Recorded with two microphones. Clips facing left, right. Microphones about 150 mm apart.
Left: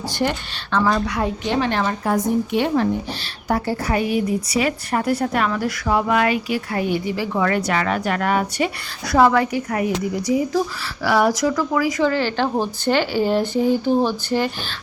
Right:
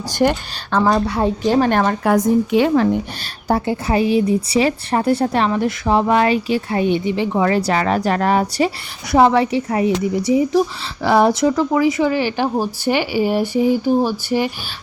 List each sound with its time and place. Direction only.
0.2 s a woman's voice: 50° right (ahead or behind)
0.8 s a woman's voice: 35° right (ahead or behind); by 2.0 s 50° right (ahead or behind)
3.5 s a woman's voice: 25° right (ahead or behind)
9.1 s a woman's voice: 25° right (ahead or behind)